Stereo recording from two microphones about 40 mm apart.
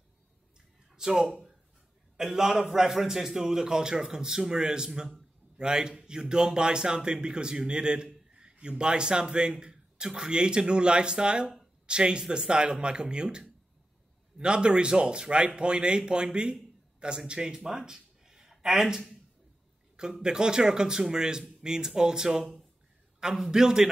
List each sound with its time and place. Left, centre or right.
0.9 s a man's voice: centre
17.6 s a sound: centre
18.9 s speech: centre